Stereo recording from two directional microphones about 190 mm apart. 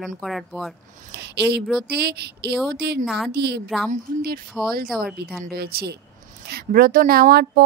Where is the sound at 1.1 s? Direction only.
60° right (ahead or behind).